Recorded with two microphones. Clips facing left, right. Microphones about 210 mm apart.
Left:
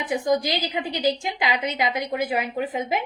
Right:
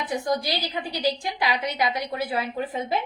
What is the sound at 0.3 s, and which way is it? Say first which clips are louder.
A woman's voice: left 6 dB; 15° left (ahead or behind).